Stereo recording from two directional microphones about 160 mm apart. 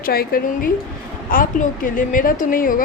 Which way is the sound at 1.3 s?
60° left (ahead or behind).